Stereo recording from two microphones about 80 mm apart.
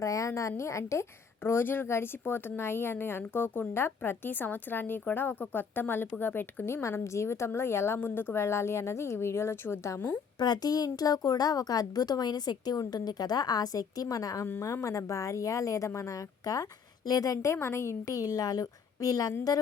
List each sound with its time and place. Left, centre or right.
0.0 s a woman's voice: left
10.4 s a woman's voice: left
18.0 s a woman's voice: left